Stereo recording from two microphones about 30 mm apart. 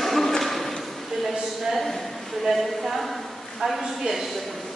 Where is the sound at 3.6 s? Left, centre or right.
Centre.